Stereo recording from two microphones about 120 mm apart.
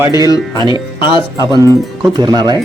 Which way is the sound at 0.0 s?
30° right (ahead or behind).